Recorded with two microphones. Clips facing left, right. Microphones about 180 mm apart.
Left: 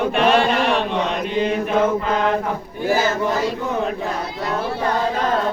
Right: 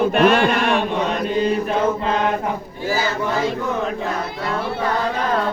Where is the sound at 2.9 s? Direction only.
50° left (ahead or behind).